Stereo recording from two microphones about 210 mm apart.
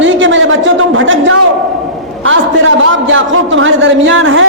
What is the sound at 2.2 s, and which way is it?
A man's voice, 70° right (ahead or behind).